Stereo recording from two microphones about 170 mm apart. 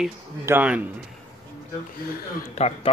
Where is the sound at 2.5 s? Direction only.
40° left (ahead or behind).